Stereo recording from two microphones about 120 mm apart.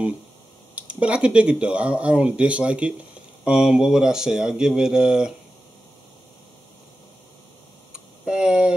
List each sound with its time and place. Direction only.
0.7 s speech: 10° right (ahead or behind)
7.9 s tick: 5° right (ahead or behind)